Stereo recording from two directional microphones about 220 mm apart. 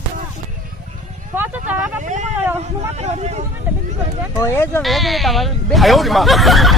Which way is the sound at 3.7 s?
10° right (ahead or behind).